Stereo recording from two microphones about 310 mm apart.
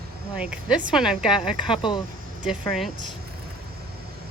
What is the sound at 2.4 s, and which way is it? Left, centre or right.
Speech, centre.